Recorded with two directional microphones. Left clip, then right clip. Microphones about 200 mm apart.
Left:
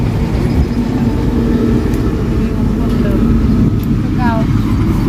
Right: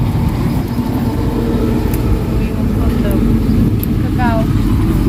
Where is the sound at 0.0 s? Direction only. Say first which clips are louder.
Left 1 dB; 60° left (ahead or behind).